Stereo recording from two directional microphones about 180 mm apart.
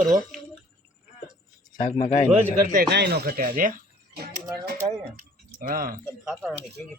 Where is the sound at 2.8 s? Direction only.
65° right (ahead or behind).